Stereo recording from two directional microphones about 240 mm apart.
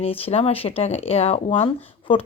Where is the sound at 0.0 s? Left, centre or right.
Left.